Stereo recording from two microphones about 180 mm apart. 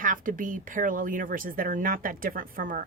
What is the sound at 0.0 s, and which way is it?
A woman's voice, 45° right (ahead or behind).